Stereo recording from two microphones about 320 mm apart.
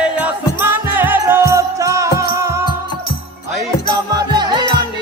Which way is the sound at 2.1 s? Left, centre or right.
Left.